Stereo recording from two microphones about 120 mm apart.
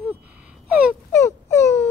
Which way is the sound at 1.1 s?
20° left (ahead or behind).